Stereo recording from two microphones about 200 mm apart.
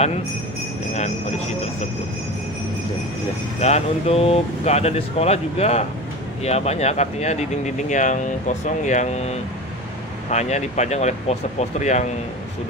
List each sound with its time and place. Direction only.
3.6 s speech: 30° left (ahead or behind)